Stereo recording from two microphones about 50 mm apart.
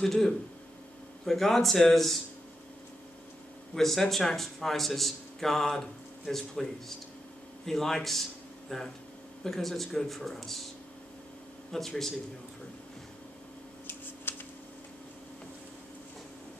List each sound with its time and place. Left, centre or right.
0.0 s a man's voice: centre
3.7 s a man's voice: centre
11.7 s a man's voice: centre
14.3 s a sound: left